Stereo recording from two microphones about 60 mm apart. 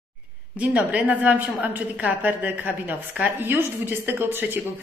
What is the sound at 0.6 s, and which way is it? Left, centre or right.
A woman's voice, right.